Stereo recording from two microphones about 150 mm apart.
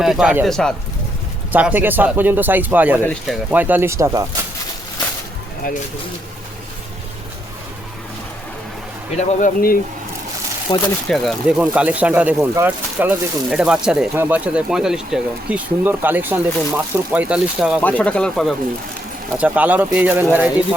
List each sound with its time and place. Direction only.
0.0 s speech: 5° right (ahead or behind)
1.5 s speech: 10° right (ahead or behind)
9.1 s speech: 65° left (ahead or behind)
10.7 s speech: 30° left (ahead or behind)
11.1 s speech: centre (ahead or behind)
11.4 s speech: 10° right (ahead or behind)
17.7 s speech: 10° left (ahead or behind)
19.4 s speech: 10° right (ahead or behind)